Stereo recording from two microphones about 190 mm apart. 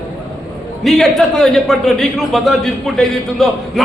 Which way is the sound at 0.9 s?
Centre (ahead or behind).